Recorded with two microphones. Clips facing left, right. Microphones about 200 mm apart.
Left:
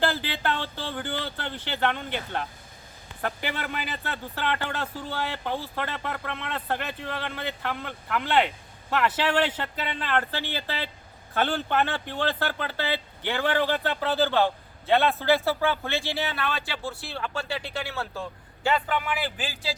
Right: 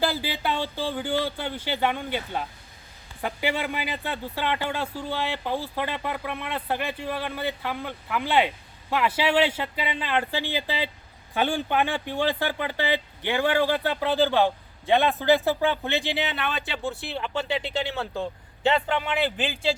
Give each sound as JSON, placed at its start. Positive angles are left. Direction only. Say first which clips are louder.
{"t": 0.0, "sound": "speech", "louder": "even", "side_deg": -10}